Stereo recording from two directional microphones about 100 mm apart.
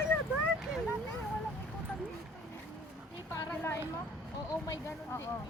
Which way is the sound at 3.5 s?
25° left (ahead or behind).